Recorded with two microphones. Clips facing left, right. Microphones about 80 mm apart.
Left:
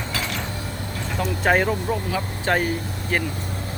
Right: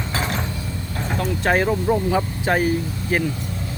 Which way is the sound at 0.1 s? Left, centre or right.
Right.